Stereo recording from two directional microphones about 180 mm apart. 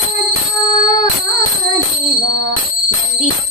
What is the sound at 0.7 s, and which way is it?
Music, 45° left (ahead or behind).